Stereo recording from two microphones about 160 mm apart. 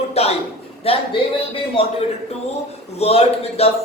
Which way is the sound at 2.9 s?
40° left (ahead or behind).